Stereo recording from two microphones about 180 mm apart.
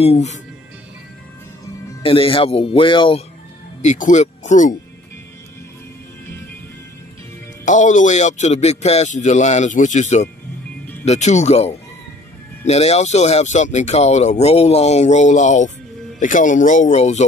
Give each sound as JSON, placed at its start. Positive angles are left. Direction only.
{"t": 0.0, "sound": "speech", "side_deg": 35}
{"t": 2.0, "sound": "speech", "side_deg": 30}
{"t": 3.8, "sound": "speech", "side_deg": 40}
{"t": 7.6, "sound": "speech", "side_deg": 45}